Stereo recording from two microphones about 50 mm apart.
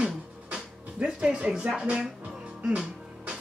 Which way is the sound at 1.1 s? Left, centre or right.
Right.